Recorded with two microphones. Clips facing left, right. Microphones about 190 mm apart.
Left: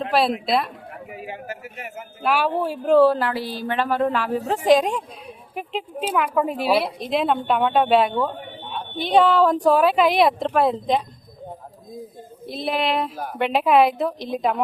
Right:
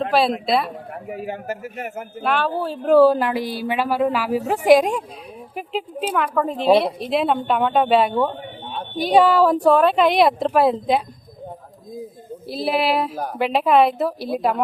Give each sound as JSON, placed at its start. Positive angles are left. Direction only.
{"t": 0.1, "sound": "a woman's voice", "side_deg": 0}
{"t": 1.0, "sound": "a man's voice", "side_deg": -45}
{"t": 2.2, "sound": "a woman's voice", "side_deg": 10}
{"t": 2.8, "sound": "a woman's voice", "side_deg": -10}
{"t": 9.7, "sound": "speech", "side_deg": 5}
{"t": 12.5, "sound": "speech", "side_deg": -5}